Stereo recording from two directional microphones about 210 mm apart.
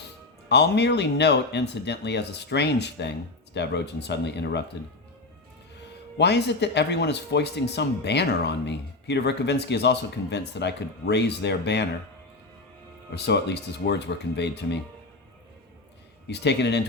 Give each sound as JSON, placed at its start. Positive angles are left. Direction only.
{"t": 0.4, "sound": "speech", "side_deg": 55}
{"t": 6.1, "sound": "speech", "side_deg": 55}
{"t": 13.1, "sound": "speech", "side_deg": 55}
{"t": 16.3, "sound": "speech", "side_deg": 55}